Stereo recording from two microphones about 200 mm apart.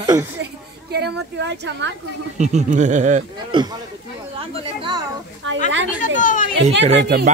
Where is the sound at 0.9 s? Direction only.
55° right (ahead or behind).